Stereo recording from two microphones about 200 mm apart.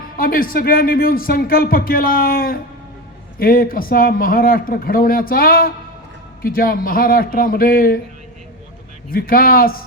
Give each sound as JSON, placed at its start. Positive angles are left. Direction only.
{"t": 0.2, "sound": "speech", "side_deg": 45}
{"t": 9.0, "sound": "speech", "side_deg": 45}